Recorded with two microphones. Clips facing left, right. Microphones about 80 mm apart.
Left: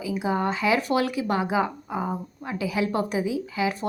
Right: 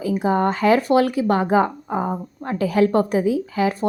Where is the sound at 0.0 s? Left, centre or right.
Right.